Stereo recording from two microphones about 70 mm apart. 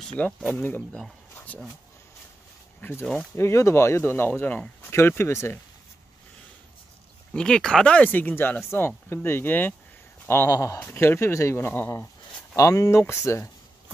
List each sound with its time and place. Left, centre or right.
0.2 s speech: left
2.8 s speech: left
3.3 s speech: left
7.3 s speech: centre; by 10.5 s left
10.5 s speech: left
11.0 s speech: left
12.5 s speech: left
13.0 s speech: left